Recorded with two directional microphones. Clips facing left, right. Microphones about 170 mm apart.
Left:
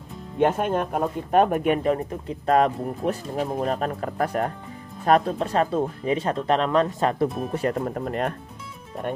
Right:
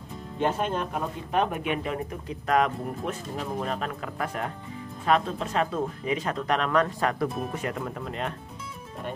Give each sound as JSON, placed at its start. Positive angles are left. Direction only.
{"t": 0.4, "sound": "speech", "side_deg": 50}
{"t": 2.2, "sound": "speech", "side_deg": 30}
{"t": 7.5, "sound": "speech", "side_deg": 35}